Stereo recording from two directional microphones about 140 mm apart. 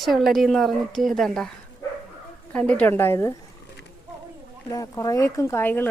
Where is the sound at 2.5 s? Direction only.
10° left (ahead or behind).